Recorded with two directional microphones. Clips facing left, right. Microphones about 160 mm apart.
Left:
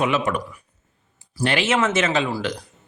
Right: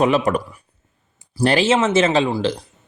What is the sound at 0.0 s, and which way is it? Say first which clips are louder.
Speech: right 5 dB; 35° right (ahead or behind).